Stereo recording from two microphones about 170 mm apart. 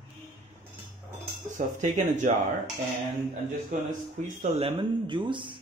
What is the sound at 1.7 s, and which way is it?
Speech, 45° right (ahead or behind).